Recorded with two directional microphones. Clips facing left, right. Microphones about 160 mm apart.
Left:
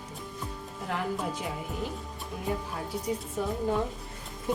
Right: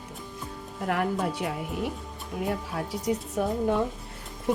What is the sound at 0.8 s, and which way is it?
A woman's voice, 65° right (ahead or behind).